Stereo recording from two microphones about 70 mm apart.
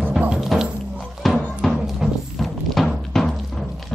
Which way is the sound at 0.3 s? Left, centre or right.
Centre.